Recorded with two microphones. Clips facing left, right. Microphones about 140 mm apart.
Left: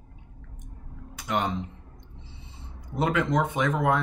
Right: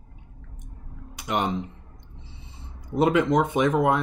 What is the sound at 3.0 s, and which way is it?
Speech, 20° right (ahead or behind).